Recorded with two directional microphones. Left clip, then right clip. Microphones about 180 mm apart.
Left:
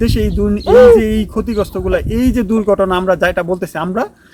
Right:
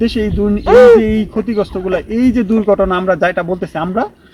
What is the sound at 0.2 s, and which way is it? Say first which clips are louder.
Speech: right 1 dB; 15° left (ahead or behind).